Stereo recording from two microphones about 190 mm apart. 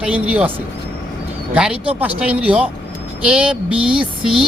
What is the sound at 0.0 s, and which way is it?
Speech, 5° right (ahead or behind).